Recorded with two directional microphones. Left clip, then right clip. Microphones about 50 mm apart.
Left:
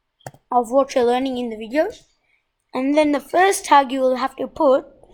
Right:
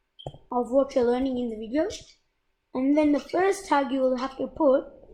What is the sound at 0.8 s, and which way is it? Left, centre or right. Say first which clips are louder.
Speech: left 3 dB; left.